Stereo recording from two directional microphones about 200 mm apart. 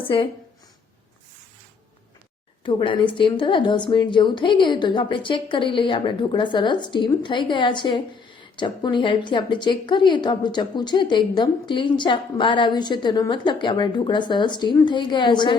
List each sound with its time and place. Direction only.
2.6 s a woman's voice: 25° left (ahead or behind)